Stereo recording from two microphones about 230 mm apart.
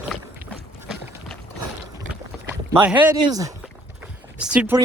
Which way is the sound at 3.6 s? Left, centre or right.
Centre.